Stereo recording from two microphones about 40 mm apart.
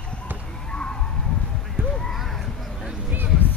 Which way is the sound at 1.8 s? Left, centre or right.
Right.